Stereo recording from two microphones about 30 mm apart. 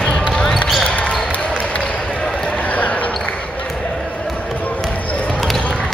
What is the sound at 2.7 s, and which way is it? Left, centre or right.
Basketball bounce, left.